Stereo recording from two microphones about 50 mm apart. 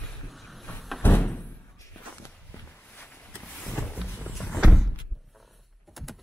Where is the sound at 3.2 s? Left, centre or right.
Left.